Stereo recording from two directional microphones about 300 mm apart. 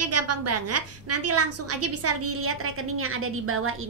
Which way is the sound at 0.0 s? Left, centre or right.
Right.